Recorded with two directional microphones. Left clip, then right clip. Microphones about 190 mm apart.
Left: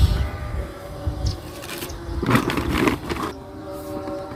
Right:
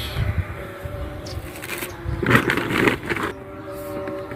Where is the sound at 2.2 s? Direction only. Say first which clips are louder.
Right 3 dB; 25° left (ahead or behind).